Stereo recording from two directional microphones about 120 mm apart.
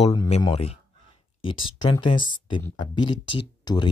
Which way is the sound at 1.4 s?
45° left (ahead or behind).